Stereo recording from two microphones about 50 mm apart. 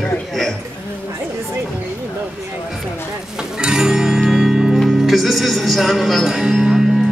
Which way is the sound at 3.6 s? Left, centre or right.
Centre.